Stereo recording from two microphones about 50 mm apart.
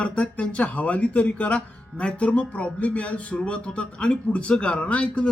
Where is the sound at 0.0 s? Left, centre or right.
Left.